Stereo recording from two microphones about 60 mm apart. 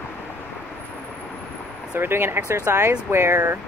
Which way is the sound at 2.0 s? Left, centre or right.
Right.